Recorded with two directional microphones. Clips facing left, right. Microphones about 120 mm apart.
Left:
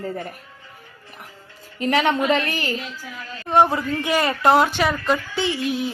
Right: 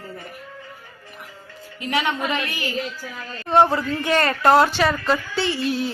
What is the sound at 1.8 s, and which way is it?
Speech, 40° left (ahead or behind).